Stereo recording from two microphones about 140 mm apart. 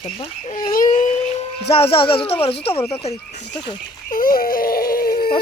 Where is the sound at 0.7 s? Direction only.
70° left (ahead or behind).